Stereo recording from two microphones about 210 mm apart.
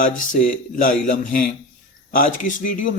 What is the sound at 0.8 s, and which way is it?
A man's voice, 40° left (ahead or behind).